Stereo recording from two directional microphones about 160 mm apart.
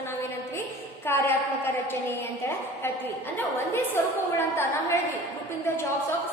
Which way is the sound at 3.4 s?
15° left (ahead or behind).